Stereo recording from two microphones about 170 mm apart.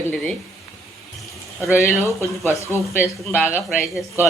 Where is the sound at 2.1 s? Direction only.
15° left (ahead or behind).